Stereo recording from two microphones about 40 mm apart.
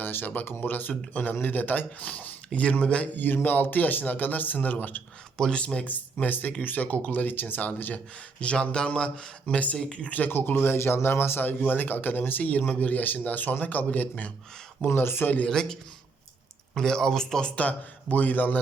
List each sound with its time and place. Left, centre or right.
0.0 s a sound: left
0.5 s speech: left
2.0 s speech: left
2.5 s speech: left
3.2 s speech: left
5.4 s speech: left
6.2 s speech: left
7.9 s speech: left
9.9 s speech: left
10.2 s speech: left
14.8 s speech: left
15.4 s speech: centre
17.6 s speech: left